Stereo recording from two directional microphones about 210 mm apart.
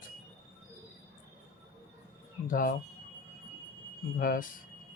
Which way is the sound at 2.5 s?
40° left (ahead or behind).